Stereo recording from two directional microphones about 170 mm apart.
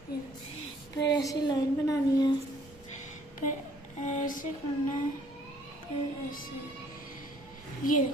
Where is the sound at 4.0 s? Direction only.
45° left (ahead or behind).